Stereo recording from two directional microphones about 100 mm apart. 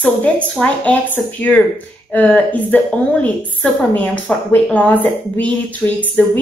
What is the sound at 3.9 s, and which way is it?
A woman's voice, 15° left (ahead or behind).